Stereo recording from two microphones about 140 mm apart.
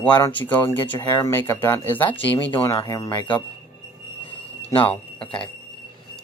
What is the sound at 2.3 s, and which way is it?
Speech, 35° left (ahead or behind).